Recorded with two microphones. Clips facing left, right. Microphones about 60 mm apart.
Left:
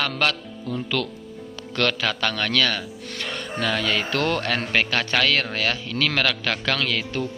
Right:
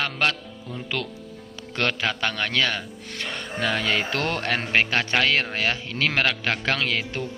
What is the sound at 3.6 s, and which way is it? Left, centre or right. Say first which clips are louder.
Speech: even; right.